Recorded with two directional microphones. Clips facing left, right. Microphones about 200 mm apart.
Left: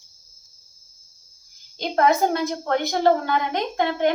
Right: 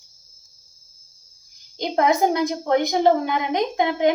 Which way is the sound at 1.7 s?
15° right (ahead or behind).